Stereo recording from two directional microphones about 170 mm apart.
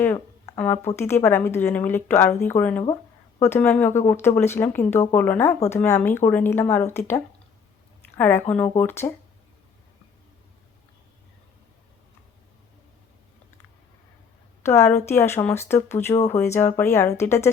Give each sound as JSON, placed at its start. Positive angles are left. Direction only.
{"t": 0.0, "sound": "speech", "side_deg": 10}
{"t": 14.6, "sound": "a woman's voice", "side_deg": 15}